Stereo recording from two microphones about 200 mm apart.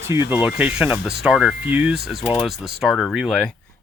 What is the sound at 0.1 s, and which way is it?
Speech, 15° right (ahead or behind).